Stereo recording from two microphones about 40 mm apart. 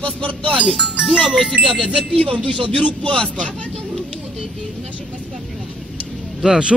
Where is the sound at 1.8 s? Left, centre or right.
Centre.